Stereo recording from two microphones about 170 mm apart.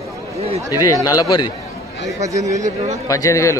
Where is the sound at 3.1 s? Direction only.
20° left (ahead or behind).